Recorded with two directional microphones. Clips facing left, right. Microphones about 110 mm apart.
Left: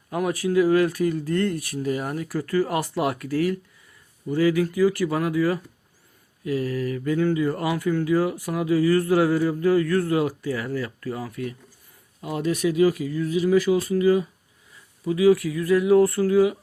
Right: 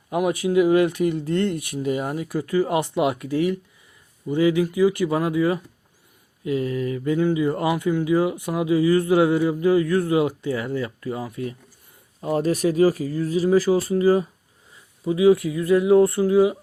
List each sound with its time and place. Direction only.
0.1 s speech: 20° right (ahead or behind)
12.2 s speech: 40° right (ahead or behind)